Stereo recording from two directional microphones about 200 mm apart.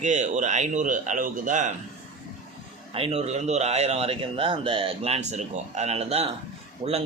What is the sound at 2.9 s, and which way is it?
Speech, 30° right (ahead or behind).